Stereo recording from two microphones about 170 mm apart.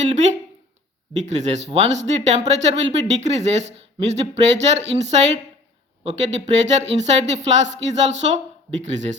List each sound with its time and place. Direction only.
0.0 s speech: 45° right (ahead or behind)